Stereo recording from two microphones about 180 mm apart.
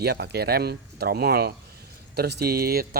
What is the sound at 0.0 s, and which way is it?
Speech, 65° right (ahead or behind).